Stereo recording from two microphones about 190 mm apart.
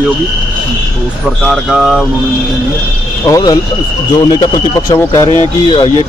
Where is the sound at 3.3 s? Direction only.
20° left (ahead or behind).